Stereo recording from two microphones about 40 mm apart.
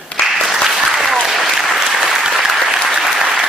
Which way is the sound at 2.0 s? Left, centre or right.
Centre.